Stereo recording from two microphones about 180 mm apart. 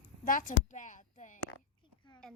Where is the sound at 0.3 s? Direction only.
50° left (ahead or behind).